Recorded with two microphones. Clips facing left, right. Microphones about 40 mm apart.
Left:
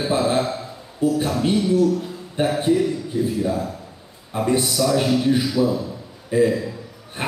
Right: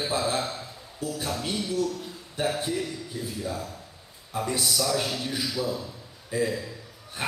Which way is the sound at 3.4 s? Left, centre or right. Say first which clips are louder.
Left 10 dB; left.